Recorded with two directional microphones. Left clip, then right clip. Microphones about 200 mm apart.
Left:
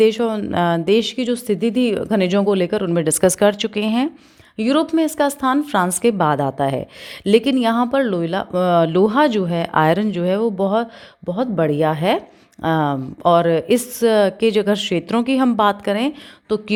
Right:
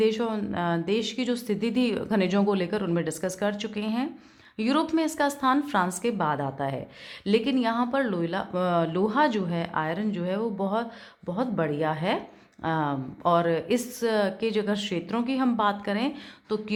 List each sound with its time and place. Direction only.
0.0 s a woman's voice: 35° left (ahead or behind)
4.5 s a woman's voice: 30° left (ahead or behind)